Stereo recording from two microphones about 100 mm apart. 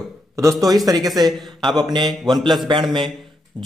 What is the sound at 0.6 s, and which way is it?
Speech, 40° right (ahead or behind).